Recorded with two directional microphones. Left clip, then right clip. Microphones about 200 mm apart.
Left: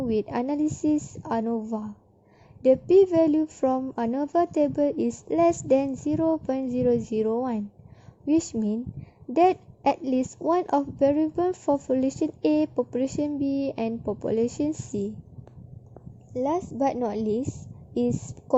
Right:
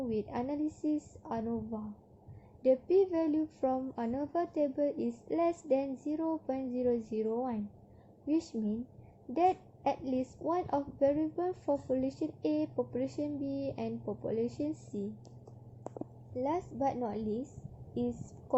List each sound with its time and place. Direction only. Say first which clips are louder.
0.1 s a woman's voice: left 12 dB; 50° left (ahead or behind)
16.3 s a woman's voice: left 8 dB; 40° left (ahead or behind)